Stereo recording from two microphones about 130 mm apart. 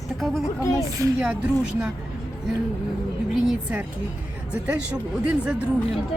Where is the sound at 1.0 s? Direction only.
20° right (ahead or behind).